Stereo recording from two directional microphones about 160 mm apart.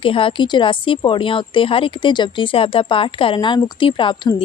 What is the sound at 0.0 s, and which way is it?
Speech, 35° left (ahead or behind).